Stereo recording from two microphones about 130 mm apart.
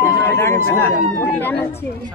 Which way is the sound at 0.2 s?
15° left (ahead or behind).